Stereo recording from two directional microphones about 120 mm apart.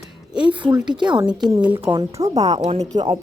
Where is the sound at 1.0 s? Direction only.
40° right (ahead or behind).